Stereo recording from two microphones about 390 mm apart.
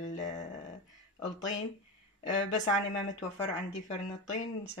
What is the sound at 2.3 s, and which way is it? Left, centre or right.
Speech, centre.